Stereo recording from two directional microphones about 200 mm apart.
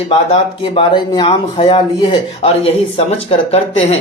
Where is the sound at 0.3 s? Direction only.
30° left (ahead or behind).